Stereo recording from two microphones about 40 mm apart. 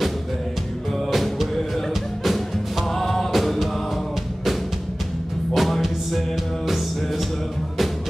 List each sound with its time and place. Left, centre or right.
1.1 s music: centre
2.9 s music: centre
5.5 s music: centre